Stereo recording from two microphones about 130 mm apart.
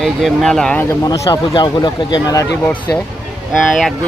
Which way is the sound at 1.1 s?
35° left (ahead or behind).